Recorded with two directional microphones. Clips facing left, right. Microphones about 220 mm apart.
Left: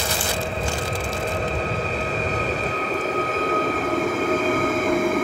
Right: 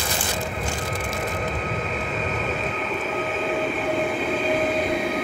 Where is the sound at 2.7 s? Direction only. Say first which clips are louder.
Left 3 dB; 40° left (ahead or behind).